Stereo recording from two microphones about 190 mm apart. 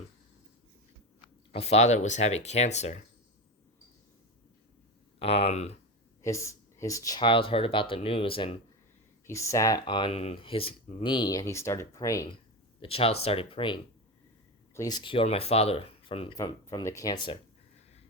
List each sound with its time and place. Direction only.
1.5 s speech: 35° left (ahead or behind)
5.2 s speech: 30° left (ahead or behind)
6.2 s speech: 15° left (ahead or behind)
9.2 s speech: 15° left (ahead or behind)
12.8 s speech: 30° left (ahead or behind)
16.4 s speech: 15° left (ahead or behind)